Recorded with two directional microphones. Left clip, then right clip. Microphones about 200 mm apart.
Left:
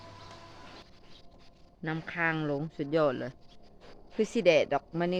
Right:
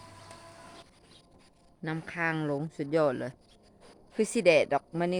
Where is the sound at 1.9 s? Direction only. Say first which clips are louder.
Left 1 dB; 20° right (ahead or behind).